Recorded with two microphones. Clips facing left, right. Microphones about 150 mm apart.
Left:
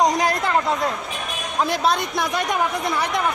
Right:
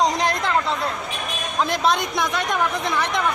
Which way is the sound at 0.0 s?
10° left (ahead or behind).